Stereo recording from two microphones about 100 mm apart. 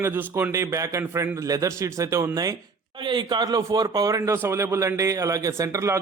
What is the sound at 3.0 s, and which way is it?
Speech, 50° right (ahead or behind).